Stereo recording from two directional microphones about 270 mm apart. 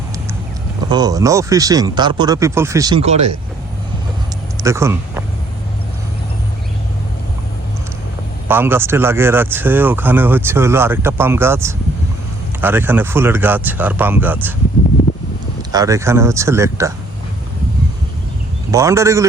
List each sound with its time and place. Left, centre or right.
0.9 s speech: centre
4.5 s speech: centre
8.4 s speech: centre
15.7 s speech: centre
18.7 s speech: centre